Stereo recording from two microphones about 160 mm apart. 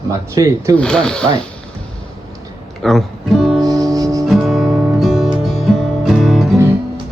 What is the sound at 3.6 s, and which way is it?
Music, 25° right (ahead or behind).